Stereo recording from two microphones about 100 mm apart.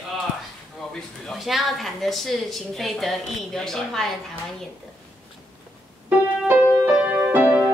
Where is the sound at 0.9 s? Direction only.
Centre (ahead or behind).